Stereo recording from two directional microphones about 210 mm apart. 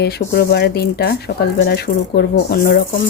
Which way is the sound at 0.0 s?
50° left (ahead or behind).